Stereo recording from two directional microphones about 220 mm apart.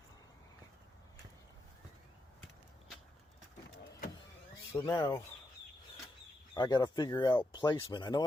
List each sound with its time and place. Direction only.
4.7 s speech: 15° left (ahead or behind)
6.5 s speech: 20° left (ahead or behind)